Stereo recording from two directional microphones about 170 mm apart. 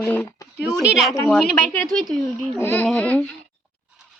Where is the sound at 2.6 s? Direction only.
15° left (ahead or behind).